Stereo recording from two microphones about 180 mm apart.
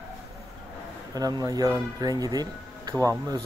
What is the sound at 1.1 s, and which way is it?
Speech, 20° right (ahead or behind).